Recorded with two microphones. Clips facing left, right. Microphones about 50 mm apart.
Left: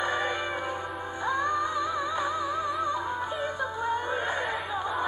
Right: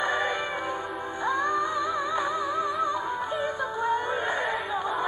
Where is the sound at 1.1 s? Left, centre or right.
Right.